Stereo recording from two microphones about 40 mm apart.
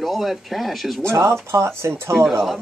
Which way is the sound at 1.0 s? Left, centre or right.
Right.